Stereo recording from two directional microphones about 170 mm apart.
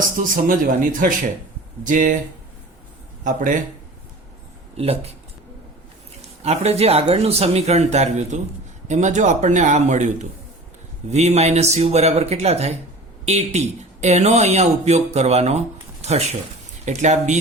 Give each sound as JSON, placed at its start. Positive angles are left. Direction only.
{"t": 0.2, "sound": "speech", "side_deg": -55}
{"t": 3.2, "sound": "speech", "side_deg": -45}
{"t": 6.4, "sound": "speech", "side_deg": -40}